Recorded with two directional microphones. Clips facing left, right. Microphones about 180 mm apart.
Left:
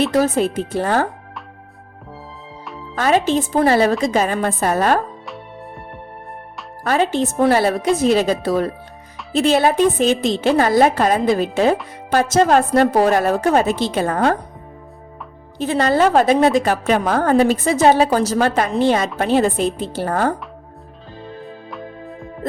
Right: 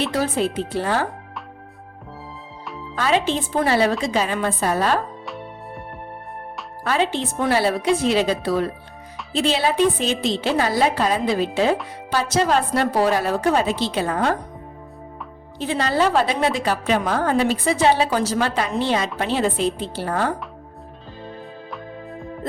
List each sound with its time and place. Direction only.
0.1 s a woman's voice: 45° left (ahead or behind)
2.9 s a woman's voice: 45° left (ahead or behind)
5.2 s music: centre (ahead or behind)
6.8 s a woman's voice: 45° left (ahead or behind)
15.5 s a woman's voice: 45° left (ahead or behind)
21.4 s music: centre (ahead or behind)